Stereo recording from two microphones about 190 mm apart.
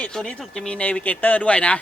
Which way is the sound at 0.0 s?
5° left (ahead or behind).